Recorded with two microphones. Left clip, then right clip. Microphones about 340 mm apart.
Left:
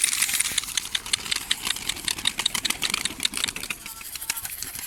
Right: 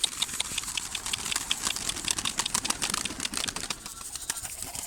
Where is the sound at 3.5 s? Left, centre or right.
Centre.